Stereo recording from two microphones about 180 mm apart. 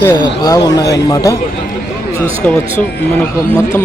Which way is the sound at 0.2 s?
20° left (ahead or behind).